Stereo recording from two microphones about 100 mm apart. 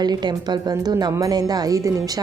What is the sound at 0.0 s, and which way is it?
A woman's voice, 45° right (ahead or behind).